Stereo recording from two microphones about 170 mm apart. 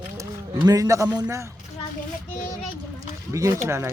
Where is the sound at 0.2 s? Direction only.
20° right (ahead or behind).